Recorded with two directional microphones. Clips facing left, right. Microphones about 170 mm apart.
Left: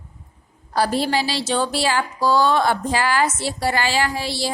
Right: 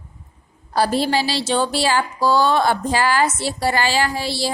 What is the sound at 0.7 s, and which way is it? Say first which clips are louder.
Speech: right 2 dB; 30° right (ahead or behind).